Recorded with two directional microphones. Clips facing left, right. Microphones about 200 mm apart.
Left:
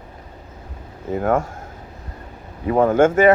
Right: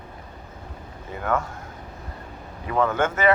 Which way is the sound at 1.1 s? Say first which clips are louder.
Left 6 dB; 45° left (ahead or behind).